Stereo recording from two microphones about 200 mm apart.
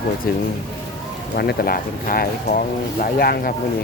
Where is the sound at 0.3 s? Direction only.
45° left (ahead or behind).